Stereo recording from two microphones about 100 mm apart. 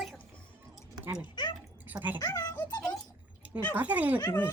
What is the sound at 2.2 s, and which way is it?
Speech, 40° left (ahead or behind).